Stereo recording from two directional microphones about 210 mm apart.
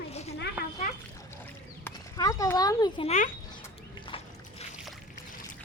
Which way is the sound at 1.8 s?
15° left (ahead or behind).